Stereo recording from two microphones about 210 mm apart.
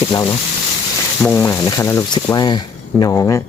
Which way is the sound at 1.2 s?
5° left (ahead or behind).